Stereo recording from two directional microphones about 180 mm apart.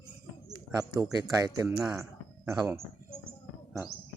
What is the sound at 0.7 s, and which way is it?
Speech, 20° right (ahead or behind).